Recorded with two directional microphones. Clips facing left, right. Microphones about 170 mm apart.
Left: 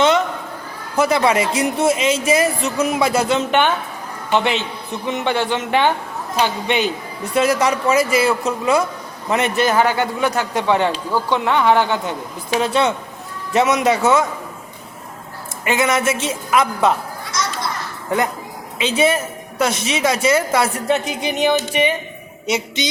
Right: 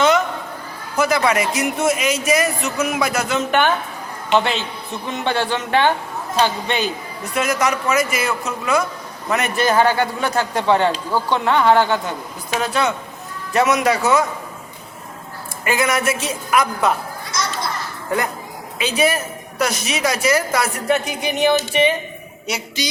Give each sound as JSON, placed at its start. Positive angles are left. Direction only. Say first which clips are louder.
{"t": 0.9, "sound": "a woman's voice", "louder": "left 2 dB", "side_deg": 30}
{"t": 5.0, "sound": "a man's voice", "louder": "left 2 dB", "side_deg": 20}
{"t": 7.3, "sound": "a woman's voice", "louder": "left 3 dB", "side_deg": 30}
{"t": 15.6, "sound": "a woman's voice", "louder": "left 1 dB", "side_deg": 25}
{"t": 18.8, "sound": "a woman's voice", "louder": "left 2 dB", "side_deg": 25}